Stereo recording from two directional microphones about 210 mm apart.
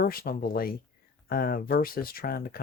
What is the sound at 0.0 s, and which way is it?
Speech, 45° left (ahead or behind).